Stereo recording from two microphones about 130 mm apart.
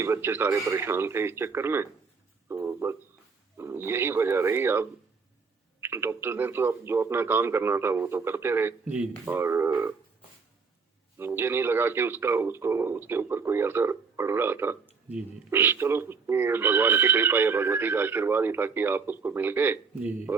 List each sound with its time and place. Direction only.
0.0 s a man's voice: 20° right (ahead or behind)
2.5 s a sound: 20° right (ahead or behind)
3.6 s a man's voice: 20° right (ahead or behind)
11.2 s speech: 15° right (ahead or behind)